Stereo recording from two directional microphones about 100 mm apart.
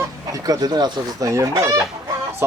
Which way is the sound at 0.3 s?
40° right (ahead or behind).